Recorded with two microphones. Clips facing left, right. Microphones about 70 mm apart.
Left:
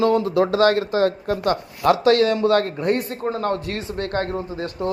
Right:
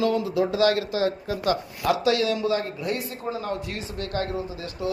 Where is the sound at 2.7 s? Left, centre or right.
Left.